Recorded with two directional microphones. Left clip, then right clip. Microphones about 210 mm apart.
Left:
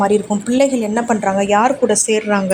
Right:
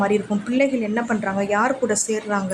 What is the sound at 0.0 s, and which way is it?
A woman's voice, 5° left (ahead or behind).